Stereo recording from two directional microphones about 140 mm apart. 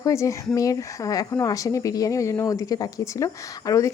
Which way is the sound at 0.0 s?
20° left (ahead or behind).